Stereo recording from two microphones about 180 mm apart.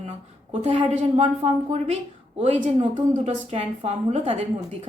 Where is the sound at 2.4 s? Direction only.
40° right (ahead or behind).